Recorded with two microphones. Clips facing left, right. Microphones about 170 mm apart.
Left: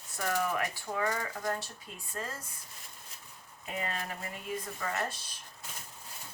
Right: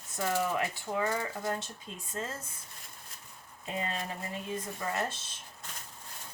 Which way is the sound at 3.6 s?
25° right (ahead or behind).